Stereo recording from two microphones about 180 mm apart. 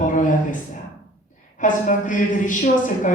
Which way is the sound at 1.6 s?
45° left (ahead or behind).